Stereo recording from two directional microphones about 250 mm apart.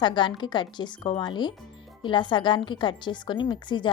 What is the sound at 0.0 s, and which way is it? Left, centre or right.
A woman's voice, centre.